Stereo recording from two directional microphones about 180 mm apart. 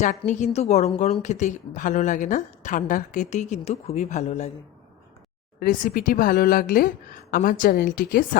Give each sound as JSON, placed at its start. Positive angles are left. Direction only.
{"t": 0.3, "sound": "speech", "side_deg": 40}
{"t": 5.5, "sound": "speech", "side_deg": 55}